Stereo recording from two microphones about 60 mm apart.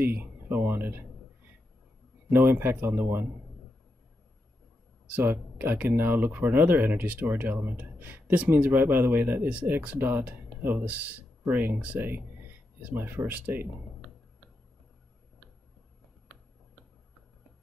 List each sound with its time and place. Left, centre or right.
0.0 s a sound: right
0.7 s speech: right
2.4 s speech: right
5.1 s speech: right